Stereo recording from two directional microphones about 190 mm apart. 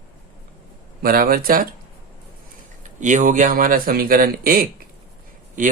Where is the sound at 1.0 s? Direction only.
50° right (ahead or behind).